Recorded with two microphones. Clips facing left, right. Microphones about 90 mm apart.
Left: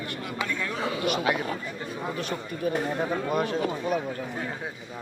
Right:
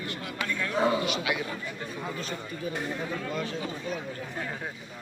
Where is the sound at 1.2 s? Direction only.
40° left (ahead or behind).